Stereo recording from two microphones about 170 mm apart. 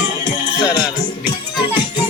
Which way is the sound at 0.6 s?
25° left (ahead or behind).